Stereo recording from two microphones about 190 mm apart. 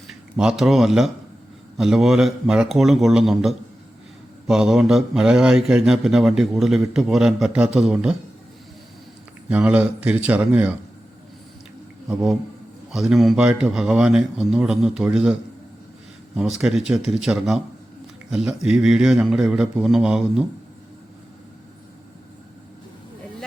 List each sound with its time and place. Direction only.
0.1 s a man's voice: 5° right (ahead or behind)
9.5 s speech: 5° right (ahead or behind)
12.0 s a man's voice: centre (ahead or behind)